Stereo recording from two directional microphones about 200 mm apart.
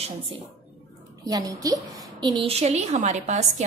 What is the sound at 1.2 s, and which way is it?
A woman's voice, 20° right (ahead or behind).